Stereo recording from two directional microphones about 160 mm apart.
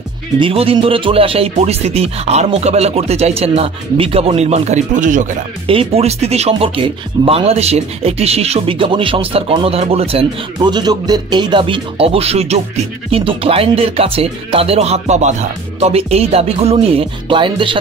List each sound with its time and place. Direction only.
0.4 s speech: 35° right (ahead or behind); by 5.3 s 55° right (ahead or behind)
5.7 s speech: 40° right (ahead or behind)